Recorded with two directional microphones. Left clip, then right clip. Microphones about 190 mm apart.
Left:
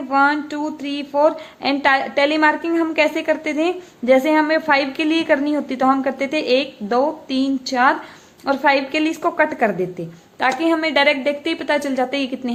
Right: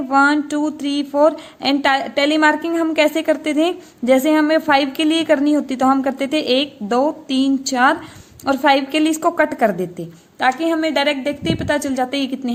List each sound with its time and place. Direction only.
0.1 s speech: 45° right (ahead or behind)